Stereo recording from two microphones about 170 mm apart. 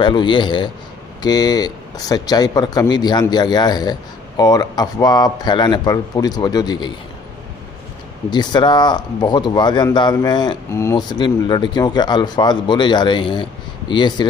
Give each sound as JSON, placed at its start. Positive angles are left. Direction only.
{"t": 0.0, "sound": "speech", "side_deg": 30}
{"t": 8.3, "sound": "speech", "side_deg": 25}